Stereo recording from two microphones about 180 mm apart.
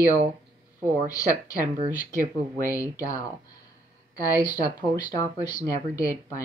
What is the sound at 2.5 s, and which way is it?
Speech, 20° left (ahead or behind).